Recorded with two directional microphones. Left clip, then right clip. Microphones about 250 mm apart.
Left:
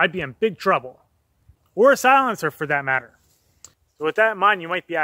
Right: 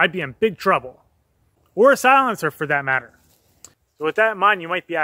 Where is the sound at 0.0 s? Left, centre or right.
Centre.